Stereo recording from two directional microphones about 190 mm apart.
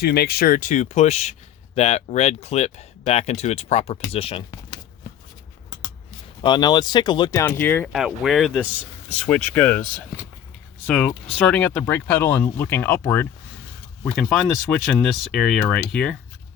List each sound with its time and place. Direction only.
0.0 s speech: 55° left (ahead or behind); by 4.4 s 30° left (ahead or behind)
6.4 s speech: 25° left (ahead or behind)
7.9 s speech: centre (ahead or behind)